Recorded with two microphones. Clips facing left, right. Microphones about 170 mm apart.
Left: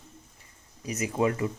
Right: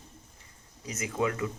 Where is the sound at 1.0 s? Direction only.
25° left (ahead or behind).